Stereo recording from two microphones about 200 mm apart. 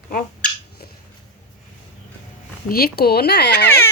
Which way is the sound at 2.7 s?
50° left (ahead or behind).